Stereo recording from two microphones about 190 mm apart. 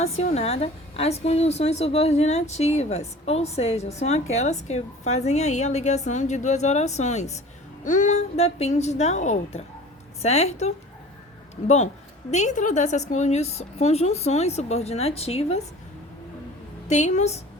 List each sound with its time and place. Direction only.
0.0 s a woman's voice: 35° left (ahead or behind)
12.3 s a woman's voice: 40° left (ahead or behind)
16.9 s a woman's voice: 40° left (ahead or behind)